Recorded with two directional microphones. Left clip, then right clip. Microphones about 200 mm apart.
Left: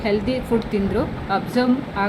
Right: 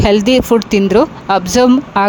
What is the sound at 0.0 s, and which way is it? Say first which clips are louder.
Speech: right 11 dB; 55° right (ahead or behind).